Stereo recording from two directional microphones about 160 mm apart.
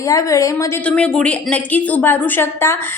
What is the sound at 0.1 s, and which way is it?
Speech, 20° left (ahead or behind).